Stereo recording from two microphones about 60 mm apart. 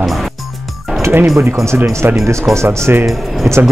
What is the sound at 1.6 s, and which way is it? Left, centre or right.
Speech, right.